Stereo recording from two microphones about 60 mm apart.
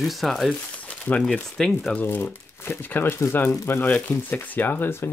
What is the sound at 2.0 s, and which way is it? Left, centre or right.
Speech, left.